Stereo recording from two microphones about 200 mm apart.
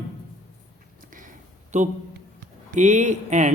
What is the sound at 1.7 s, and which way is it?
Speech, 35° right (ahead or behind).